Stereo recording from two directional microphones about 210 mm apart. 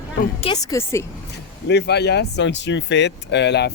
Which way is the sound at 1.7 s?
55° left (ahead or behind).